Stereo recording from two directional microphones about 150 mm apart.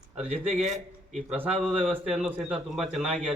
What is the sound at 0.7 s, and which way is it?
A man's voice, centre (ahead or behind).